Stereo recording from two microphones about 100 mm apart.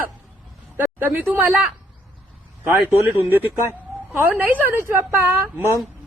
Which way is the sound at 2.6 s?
20° right (ahead or behind).